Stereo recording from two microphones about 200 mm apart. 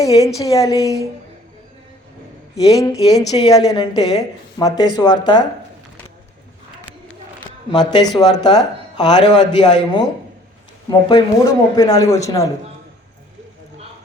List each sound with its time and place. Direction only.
0.3 s a man's voice: 15° left (ahead or behind)
2.8 s a woman's voice: 20° left (ahead or behind)
7.7 s a woman's voice: 20° left (ahead or behind)